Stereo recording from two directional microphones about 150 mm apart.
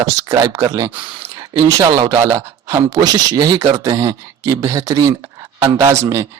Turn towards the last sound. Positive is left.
turn(degrees=-20)  # may be behind; listen again after turning